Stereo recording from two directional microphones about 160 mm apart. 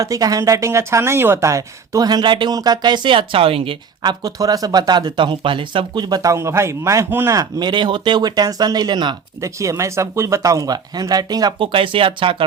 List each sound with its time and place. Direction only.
0.0 s speech: 20° right (ahead or behind)